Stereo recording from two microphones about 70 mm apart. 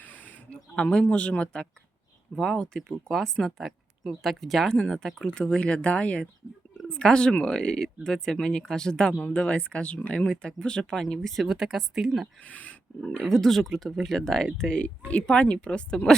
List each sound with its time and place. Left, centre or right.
0.0 s a sound: left
2.3 s speech: centre
12.4 s speech: left
13.0 s speech: centre